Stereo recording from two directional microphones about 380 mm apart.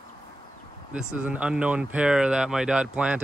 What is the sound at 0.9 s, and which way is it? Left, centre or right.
Speech, centre.